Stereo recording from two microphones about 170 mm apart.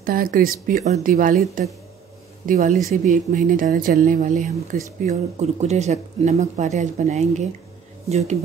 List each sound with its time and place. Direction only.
0.0 s speech: 55° right (ahead or behind); by 8.4 s 40° right (ahead or behind)